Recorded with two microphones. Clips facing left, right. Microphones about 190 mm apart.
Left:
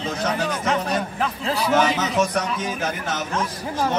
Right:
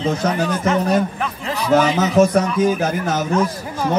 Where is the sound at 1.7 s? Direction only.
40° right (ahead or behind).